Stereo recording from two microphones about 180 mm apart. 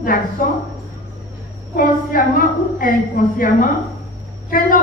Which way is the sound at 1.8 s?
50° left (ahead or behind).